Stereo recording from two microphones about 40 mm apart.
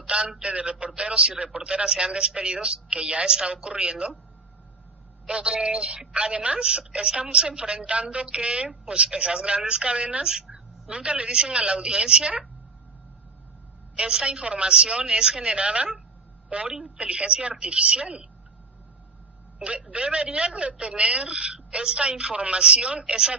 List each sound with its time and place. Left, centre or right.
0.1 s a sound: right
0.9 s speech: right
5.2 s speech: right
13.9 s a woman's voice: right
19.5 s a man's voice: right